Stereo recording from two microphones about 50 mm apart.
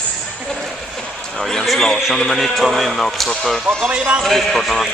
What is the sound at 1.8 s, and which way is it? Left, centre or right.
Speech, centre.